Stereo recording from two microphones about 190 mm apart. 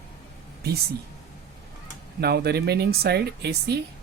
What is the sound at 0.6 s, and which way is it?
Speech, 55° right (ahead or behind).